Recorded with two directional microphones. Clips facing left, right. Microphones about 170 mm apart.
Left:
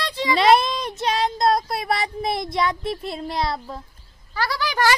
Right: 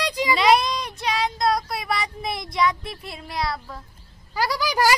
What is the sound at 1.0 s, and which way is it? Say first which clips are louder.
Speech: left 3 dB; 25° left (ahead or behind).